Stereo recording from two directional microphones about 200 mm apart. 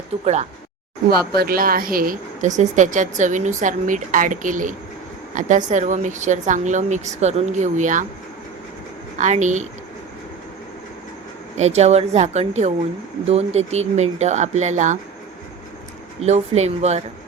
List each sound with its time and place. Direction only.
0.1 s a woman's voice: 30° right (ahead or behind)
1.4 s a woman's voice: 45° right (ahead or behind)
9.1 s a woman's voice: 35° right (ahead or behind)
11.5 s a woman's voice: 35° right (ahead or behind)
16.2 s a woman's voice: 35° right (ahead or behind)